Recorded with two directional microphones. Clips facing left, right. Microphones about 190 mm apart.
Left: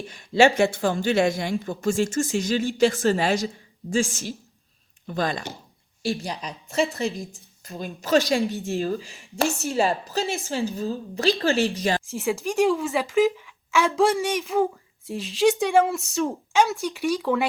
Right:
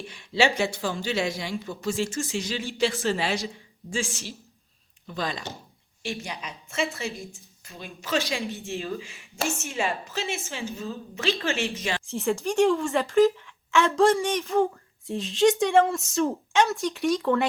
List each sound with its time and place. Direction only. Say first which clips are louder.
0.1 s a woman's voice: left 6 dB; 45° left (ahead or behind)
6.0 s speech: left 6 dB; 35° left (ahead or behind)
12.1 s a woman's voice: even; centre (ahead or behind)